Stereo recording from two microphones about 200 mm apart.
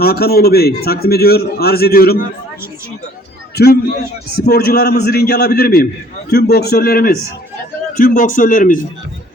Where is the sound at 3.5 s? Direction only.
50° left (ahead or behind).